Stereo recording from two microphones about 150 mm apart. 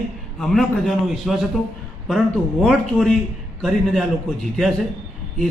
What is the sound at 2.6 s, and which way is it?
A man's voice, 5° left (ahead or behind).